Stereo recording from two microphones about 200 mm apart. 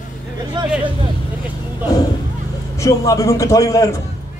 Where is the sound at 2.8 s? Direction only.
15° left (ahead or behind).